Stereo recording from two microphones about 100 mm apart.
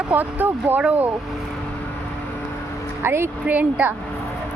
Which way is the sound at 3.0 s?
25° right (ahead or behind).